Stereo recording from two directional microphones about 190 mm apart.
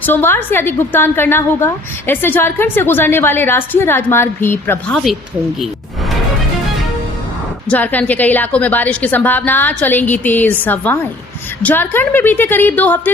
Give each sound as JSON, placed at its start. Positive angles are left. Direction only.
{"t": 0.0, "sound": "a woman's voice", "side_deg": 10}
{"t": 7.7, "sound": "a woman's voice", "side_deg": 10}